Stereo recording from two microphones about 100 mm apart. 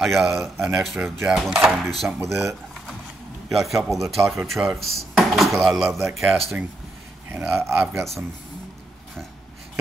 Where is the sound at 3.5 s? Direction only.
Centre (ahead or behind).